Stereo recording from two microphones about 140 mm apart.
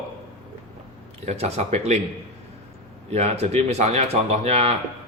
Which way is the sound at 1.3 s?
50° right (ahead or behind).